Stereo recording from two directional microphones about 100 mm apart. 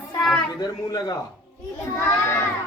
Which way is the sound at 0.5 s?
45° left (ahead or behind).